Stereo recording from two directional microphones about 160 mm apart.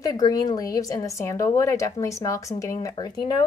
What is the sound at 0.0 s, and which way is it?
Speech, 20° left (ahead or behind).